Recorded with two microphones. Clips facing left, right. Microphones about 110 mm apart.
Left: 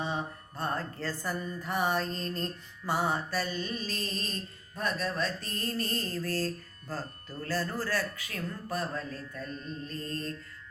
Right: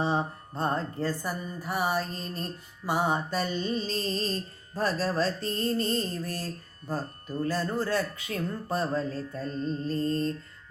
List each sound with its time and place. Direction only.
0.0 s music: 30° right (ahead or behind); by 1.4 s 15° right (ahead or behind)
1.6 s mantra: 5° right (ahead or behind); by 10.3 s 30° right (ahead or behind)